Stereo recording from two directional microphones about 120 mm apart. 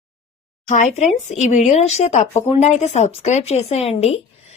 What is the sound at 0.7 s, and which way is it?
Speech, 90° left.